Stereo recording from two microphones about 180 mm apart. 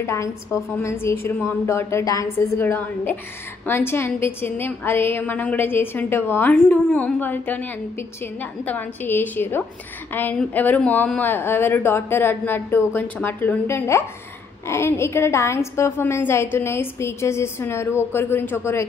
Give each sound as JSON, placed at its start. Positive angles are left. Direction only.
{"t": 0.0, "sound": "a woman's voice", "side_deg": 15}